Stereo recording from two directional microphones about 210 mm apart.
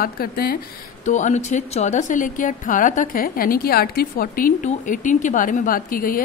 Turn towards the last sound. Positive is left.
turn(degrees=40)  # may be behind; listen again after turning